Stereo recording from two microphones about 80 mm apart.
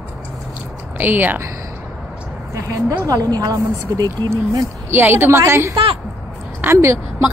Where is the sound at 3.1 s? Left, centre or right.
Right.